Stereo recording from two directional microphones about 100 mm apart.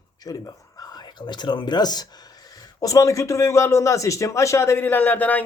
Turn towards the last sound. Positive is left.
turn(degrees=15)  # may be behind; listen again after turning